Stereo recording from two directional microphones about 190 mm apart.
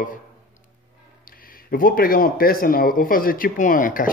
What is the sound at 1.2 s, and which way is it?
Speech, 50° left (ahead or behind).